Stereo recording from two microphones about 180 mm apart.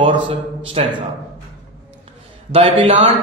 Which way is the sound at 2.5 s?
30° right (ahead or behind).